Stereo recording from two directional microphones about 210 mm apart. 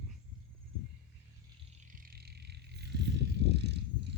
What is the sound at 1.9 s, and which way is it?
Vehicle, 45° right (ahead or behind).